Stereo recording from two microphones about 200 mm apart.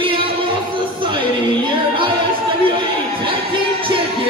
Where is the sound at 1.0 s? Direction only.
25° right (ahead or behind).